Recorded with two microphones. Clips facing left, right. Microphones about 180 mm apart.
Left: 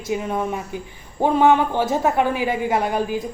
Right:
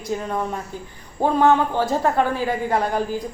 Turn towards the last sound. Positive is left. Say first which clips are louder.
# left 1 dB
turn(degrees=15)  # may be behind; listen again after turning